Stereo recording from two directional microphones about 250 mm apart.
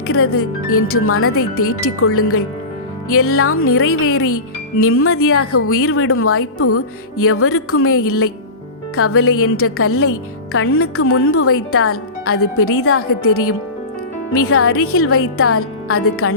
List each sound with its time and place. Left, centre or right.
0.1 s a woman's voice: left